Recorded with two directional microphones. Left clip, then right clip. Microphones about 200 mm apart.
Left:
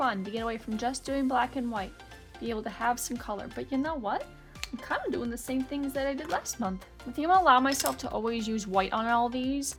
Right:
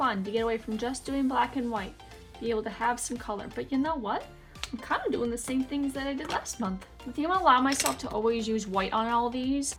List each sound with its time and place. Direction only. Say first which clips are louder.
0.0 s speech: right 2 dB; 50° left (ahead or behind)